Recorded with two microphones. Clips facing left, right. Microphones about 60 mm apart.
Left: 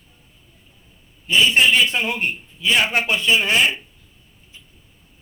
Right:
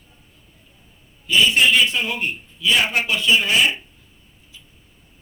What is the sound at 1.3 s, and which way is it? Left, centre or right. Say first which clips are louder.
A man's voice: left 1 dB; left.